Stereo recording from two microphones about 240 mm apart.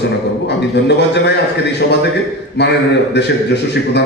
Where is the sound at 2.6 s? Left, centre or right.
Left.